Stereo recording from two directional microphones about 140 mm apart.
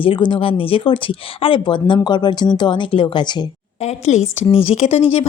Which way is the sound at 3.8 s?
55° left (ahead or behind).